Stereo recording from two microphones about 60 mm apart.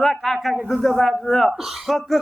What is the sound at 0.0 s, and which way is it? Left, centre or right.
A man's voice, centre.